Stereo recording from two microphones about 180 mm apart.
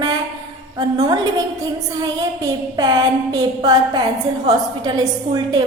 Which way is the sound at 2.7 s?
20° right (ahead or behind).